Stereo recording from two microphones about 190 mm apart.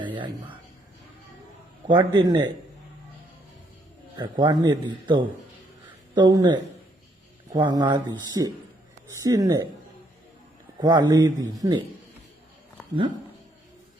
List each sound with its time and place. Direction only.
0.0 s a sound: 25° right (ahead or behind)
1.9 s a man's voice: 25° right (ahead or behind)
4.2 s a man's voice: 25° right (ahead or behind)
10.8 s a man's voice: 20° right (ahead or behind)